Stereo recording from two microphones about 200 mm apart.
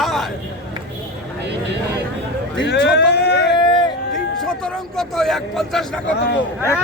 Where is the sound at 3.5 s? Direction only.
20° left (ahead or behind).